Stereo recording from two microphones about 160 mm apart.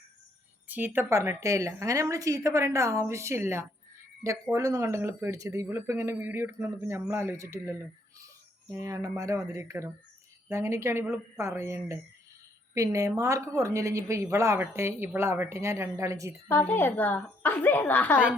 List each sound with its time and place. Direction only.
0.7 s a woman's voice: 10° right (ahead or behind)
16.5 s a woman's voice: 15° left (ahead or behind)